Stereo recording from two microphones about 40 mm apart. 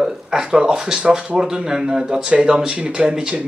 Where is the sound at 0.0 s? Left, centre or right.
Centre.